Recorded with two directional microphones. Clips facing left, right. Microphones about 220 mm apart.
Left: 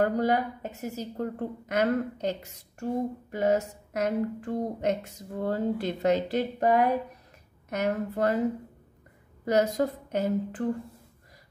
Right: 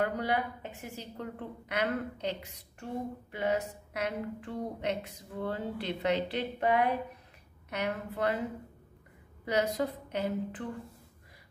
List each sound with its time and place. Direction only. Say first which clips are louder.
0.0 s a woman's voice: left 6 dB; 40° left (ahead or behind)
9.4 s a woman's voice: left 5 dB; 45° left (ahead or behind)